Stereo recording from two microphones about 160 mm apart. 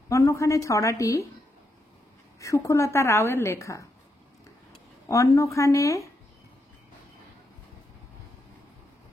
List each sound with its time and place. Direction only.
0.1 s a woman's voice: 20° left (ahead or behind)
2.4 s a woman's voice: 20° left (ahead or behind)
5.0 s a woman's voice: 20° left (ahead or behind)